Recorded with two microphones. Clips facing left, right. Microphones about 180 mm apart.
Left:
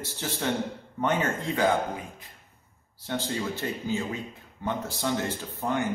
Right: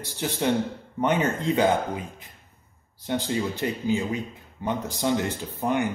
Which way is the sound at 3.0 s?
15° right (ahead or behind).